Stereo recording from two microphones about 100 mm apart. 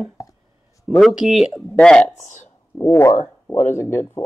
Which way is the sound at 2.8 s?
25° left (ahead or behind).